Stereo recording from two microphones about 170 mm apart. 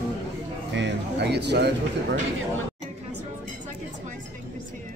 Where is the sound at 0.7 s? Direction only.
85° right.